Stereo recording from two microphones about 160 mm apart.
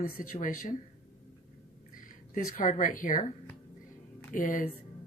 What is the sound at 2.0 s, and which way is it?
Speech, 55° left (ahead or behind).